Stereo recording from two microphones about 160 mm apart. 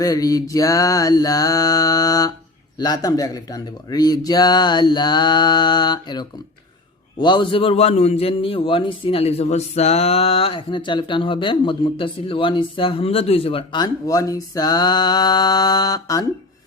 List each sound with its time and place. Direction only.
0.0 s a man's voice: 20° left (ahead or behind)